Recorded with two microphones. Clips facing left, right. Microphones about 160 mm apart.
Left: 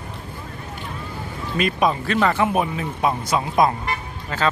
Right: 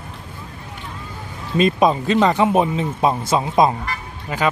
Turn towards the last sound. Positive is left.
turn(degrees=-10)  # may be behind; listen again after turning